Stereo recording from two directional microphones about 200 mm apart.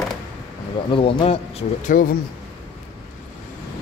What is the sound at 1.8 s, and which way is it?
Speech, 45° left (ahead or behind).